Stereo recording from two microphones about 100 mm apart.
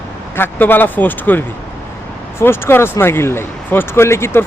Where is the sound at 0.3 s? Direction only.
20° left (ahead or behind).